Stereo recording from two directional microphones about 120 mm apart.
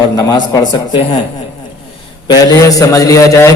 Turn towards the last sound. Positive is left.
turn(degrees=25)  # may be behind; listen again after turning